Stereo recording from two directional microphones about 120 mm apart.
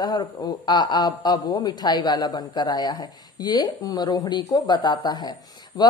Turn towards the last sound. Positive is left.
turn(degrees=35)  # may be behind; listen again after turning